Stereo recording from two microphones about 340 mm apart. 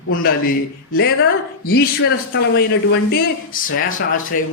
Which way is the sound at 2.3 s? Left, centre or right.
Left.